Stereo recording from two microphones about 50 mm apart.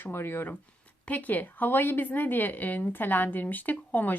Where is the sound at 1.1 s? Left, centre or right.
Left.